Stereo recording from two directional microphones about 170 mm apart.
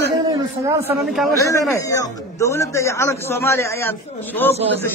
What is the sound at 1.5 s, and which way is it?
A man's voice, 20° left (ahead or behind).